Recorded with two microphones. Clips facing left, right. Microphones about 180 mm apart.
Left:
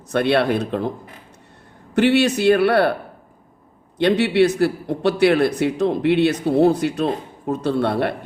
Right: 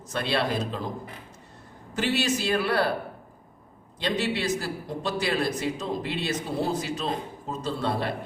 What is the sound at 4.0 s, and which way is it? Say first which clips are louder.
A man's voice: left 12 dB; 65° left (ahead or behind).